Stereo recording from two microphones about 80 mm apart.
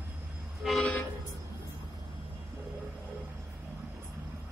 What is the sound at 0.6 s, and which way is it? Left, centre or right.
Toot, centre.